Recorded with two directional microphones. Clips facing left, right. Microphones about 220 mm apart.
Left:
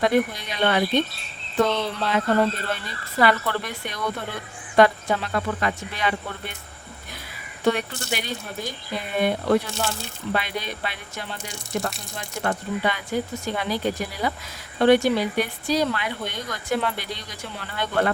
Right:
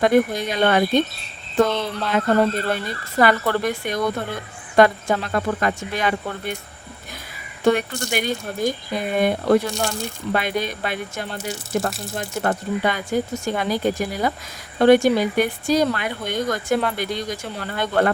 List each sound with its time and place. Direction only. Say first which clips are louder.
0.0 s speech: right 4 dB; 45° right (ahead or behind)
2.1 s speech: right 4 dB; 50° right (ahead or behind)
7.6 s speech: right 4 dB; 50° right (ahead or behind)
11.3 s speech: right 6 dB; 5° right (ahead or behind)
12.4 s speech: right 3 dB; 40° right (ahead or behind)